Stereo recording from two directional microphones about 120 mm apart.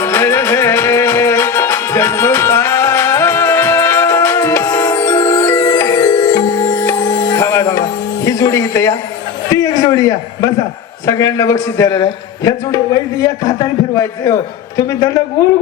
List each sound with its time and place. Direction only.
0.0 s music: 25° left (ahead or behind)
6.7 s music: 20° left (ahead or behind)
9.5 s a sound: 30° left (ahead or behind)
11.0 s a man's voice: 25° left (ahead or behind)